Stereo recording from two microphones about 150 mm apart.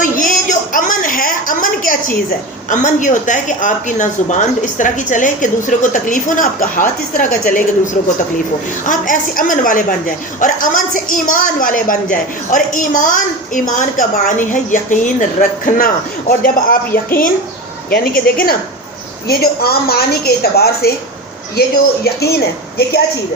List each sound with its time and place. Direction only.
0.0 s a sound: 60° left (ahead or behind)
2.6 s a woman's voice: 55° left (ahead or behind)
8.9 s a woman's voice: 65° left (ahead or behind)
19.3 s a woman's voice: 90° left